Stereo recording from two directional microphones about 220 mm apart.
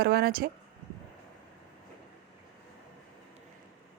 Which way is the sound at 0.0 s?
45° right (ahead or behind).